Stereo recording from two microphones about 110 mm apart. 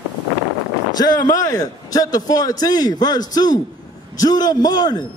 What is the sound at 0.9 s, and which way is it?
A man's voice, 35° left (ahead or behind).